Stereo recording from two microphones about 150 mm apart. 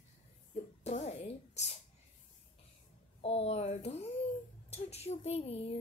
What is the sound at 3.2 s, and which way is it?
Speech, 40° left (ahead or behind).